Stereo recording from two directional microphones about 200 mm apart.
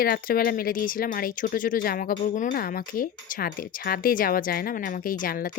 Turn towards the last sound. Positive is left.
turn(degrees=45)  # may be behind; listen again after turning